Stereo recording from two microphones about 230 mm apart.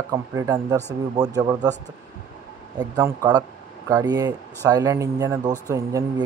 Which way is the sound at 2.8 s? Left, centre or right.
Centre.